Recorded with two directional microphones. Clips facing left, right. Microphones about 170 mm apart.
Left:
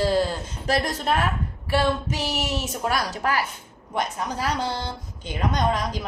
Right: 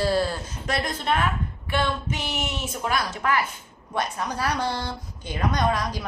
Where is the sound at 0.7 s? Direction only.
35° left (ahead or behind).